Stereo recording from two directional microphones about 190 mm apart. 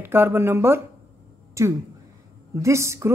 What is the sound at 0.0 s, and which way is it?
Speech, 10° right (ahead or behind).